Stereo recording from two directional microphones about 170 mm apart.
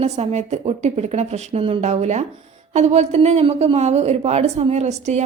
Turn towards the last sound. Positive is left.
turn(degrees=-40)  # may be behind; listen again after turning